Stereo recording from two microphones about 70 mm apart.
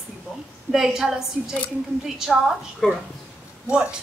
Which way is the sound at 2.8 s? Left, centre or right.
Centre.